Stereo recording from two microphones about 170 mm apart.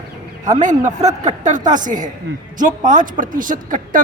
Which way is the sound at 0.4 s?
45° right (ahead or behind).